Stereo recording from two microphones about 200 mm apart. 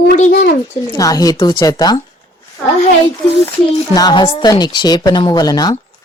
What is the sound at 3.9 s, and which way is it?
Speech, 20° left (ahead or behind).